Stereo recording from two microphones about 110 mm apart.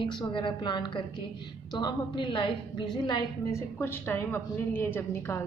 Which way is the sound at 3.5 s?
25° left (ahead or behind).